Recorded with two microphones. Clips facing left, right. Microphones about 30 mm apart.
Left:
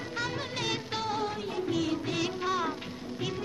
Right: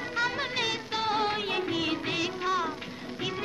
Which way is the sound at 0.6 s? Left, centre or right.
Centre.